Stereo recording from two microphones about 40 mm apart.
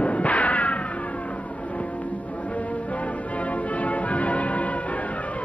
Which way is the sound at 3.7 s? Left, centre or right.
Left.